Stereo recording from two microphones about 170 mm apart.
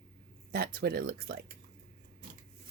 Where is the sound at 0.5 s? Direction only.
60° right (ahead or behind).